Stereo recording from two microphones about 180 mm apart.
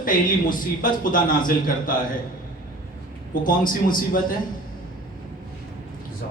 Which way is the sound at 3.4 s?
50° left (ahead or behind).